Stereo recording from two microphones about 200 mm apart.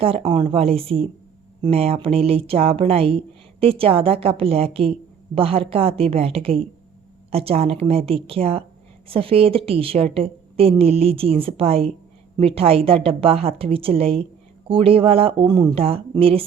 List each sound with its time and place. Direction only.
0.0 s speech: 30° right (ahead or behind)